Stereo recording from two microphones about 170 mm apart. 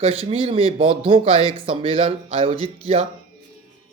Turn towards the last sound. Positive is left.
turn(degrees=-35)  # may be behind; listen again after turning